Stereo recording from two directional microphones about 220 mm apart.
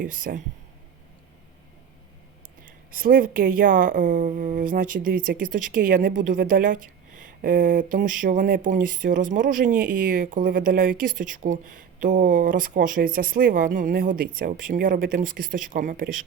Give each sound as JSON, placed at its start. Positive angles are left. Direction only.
{"t": 0.0, "sound": "speech", "side_deg": -40}
{"t": 2.6, "sound": "speech", "side_deg": -40}